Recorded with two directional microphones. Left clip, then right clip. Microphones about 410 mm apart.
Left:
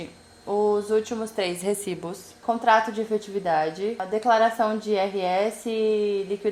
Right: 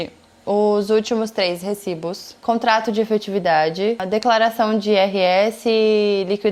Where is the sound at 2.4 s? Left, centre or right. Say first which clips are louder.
Right 3 dB; right.